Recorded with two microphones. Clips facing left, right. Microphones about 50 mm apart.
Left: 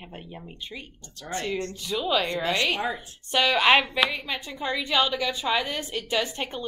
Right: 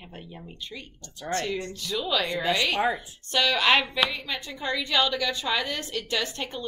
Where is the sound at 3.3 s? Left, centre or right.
Centre.